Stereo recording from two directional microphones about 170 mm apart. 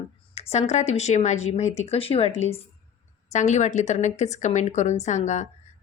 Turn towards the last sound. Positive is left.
turn(degrees=45)  # may be behind; listen again after turning